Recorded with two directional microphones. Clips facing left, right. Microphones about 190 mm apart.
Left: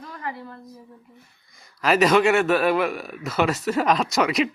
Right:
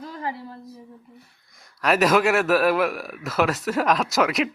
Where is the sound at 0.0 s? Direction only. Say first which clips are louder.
Right 2 dB; 30° right (ahead or behind).